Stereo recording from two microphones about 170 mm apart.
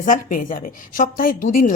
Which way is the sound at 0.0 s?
50° left (ahead or behind).